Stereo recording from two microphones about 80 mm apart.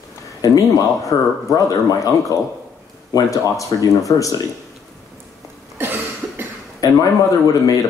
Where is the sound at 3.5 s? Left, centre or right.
Left.